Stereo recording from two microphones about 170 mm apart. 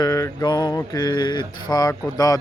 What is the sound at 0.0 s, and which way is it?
Mantra, 20° left (ahead or behind).